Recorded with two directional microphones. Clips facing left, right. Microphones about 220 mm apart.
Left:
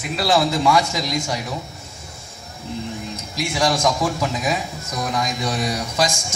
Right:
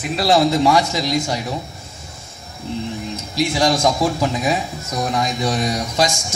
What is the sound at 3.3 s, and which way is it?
Speech, 35° right (ahead or behind).